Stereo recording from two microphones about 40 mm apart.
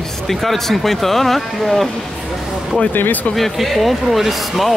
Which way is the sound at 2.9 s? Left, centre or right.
Left.